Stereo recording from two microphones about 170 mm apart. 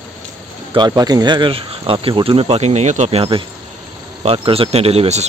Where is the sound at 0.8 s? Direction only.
25° right (ahead or behind).